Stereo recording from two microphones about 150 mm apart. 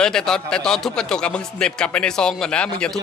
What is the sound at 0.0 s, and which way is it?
A man's voice, 5° left (ahead or behind).